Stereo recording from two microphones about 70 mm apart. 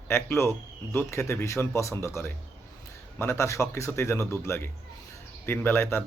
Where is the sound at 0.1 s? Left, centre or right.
Left.